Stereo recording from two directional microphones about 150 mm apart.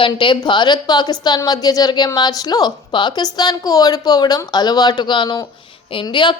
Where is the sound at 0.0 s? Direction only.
30° left (ahead or behind).